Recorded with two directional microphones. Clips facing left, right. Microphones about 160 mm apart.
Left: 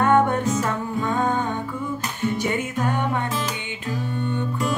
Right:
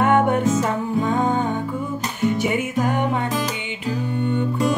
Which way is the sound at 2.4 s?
10° right (ahead or behind).